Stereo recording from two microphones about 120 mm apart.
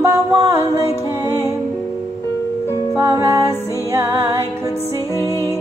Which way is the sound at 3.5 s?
25° left (ahead or behind).